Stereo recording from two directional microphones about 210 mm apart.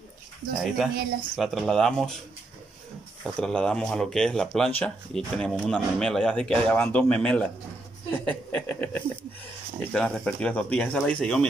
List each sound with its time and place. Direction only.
0.6 s speech: centre (ahead or behind)
3.3 s speech: 5° left (ahead or behind)